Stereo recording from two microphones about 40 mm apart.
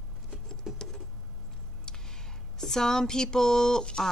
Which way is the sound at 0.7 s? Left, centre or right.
Centre.